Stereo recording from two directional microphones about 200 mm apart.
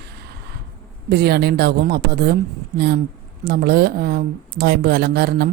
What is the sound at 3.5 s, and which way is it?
Speech, 50° right (ahead or behind).